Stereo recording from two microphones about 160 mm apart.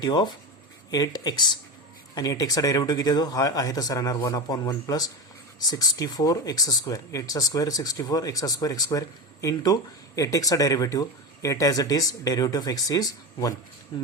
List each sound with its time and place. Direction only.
0.0 s speech: 25° left (ahead or behind)